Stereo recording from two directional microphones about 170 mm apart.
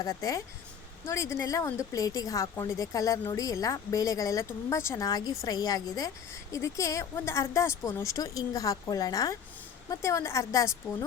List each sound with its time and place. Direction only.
0.0 s a woman's voice: 20° left (ahead or behind)